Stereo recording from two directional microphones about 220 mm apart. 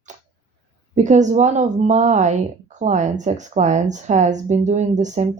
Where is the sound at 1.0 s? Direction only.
35° right (ahead or behind).